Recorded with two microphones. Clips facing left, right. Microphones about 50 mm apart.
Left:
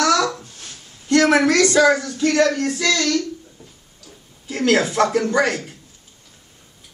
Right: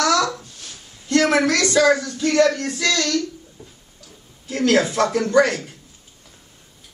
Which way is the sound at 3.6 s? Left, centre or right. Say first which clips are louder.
Right 2 dB; centre.